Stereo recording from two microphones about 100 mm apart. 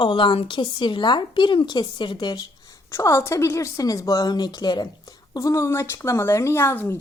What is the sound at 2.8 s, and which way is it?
A woman's voice, 30° left (ahead or behind).